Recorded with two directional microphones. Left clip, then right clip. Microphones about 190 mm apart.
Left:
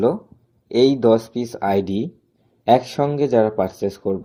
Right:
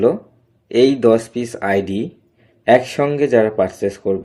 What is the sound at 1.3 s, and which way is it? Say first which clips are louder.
Speech: right 2 dB; 20° left (ahead or behind).